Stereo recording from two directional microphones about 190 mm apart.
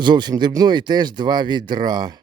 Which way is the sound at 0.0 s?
25° right (ahead or behind).